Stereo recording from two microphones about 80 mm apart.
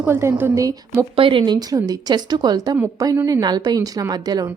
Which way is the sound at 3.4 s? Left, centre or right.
Right.